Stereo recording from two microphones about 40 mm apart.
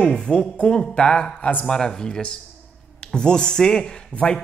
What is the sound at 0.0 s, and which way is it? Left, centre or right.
A man's voice, left.